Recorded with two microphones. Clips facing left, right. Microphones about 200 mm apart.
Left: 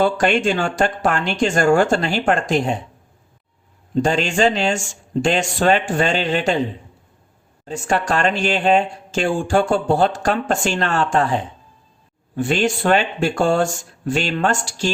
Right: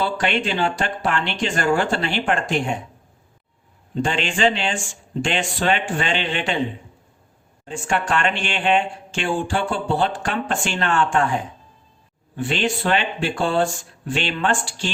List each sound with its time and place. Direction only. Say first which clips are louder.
0.0 s speech: left 6 dB; 45° left (ahead or behind)
4.0 s speech: left 3 dB; 40° left (ahead or behind)
12.4 s speech: left 4 dB; 45° left (ahead or behind)